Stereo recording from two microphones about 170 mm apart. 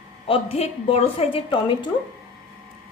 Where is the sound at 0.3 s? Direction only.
35° left (ahead or behind).